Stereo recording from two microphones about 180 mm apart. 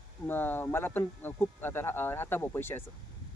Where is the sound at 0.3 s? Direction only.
10° left (ahead or behind).